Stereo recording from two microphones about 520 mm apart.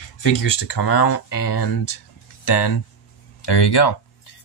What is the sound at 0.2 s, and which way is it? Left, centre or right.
Speech, left.